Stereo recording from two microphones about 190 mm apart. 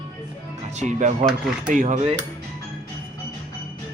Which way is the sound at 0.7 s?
40° right (ahead or behind).